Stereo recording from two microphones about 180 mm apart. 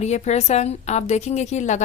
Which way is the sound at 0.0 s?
40° left (ahead or behind).